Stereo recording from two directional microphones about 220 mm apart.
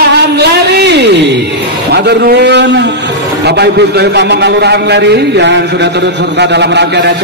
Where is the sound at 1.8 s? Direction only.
50° right (ahead or behind).